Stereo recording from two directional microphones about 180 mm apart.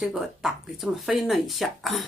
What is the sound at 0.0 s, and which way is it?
Speech, centre (ahead or behind).